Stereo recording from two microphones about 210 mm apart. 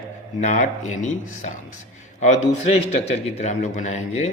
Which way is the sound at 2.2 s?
30° left (ahead or behind).